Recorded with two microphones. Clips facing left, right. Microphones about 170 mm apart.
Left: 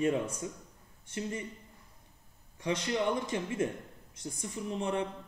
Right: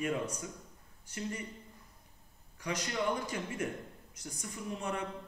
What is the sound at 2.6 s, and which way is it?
A man's voice, 25° left (ahead or behind).